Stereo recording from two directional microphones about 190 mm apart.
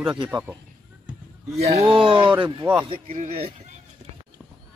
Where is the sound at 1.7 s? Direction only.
30° right (ahead or behind).